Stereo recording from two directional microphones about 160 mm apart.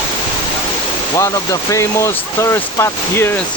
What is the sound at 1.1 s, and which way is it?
Speech, 20° left (ahead or behind).